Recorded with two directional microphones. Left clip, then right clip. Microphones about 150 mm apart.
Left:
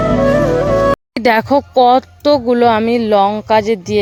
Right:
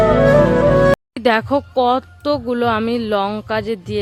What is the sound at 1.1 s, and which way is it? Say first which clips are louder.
Speech: left 4 dB; 35° left (ahead or behind).